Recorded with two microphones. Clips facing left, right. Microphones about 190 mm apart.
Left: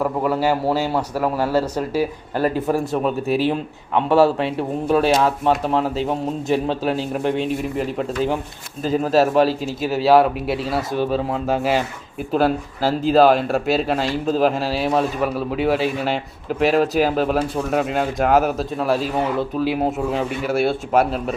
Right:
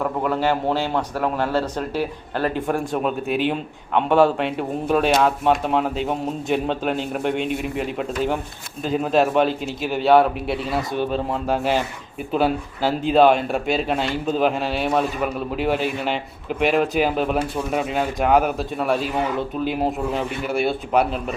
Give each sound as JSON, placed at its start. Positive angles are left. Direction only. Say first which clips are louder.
{"t": 0.0, "sound": "a man's voice", "louder": "left 2 dB", "side_deg": 5}
{"t": 3.2, "sound": "speech", "louder": "left 4 dB", "side_deg": 35}
{"t": 3.5, "sound": "speech", "louder": "left 1 dB", "side_deg": 5}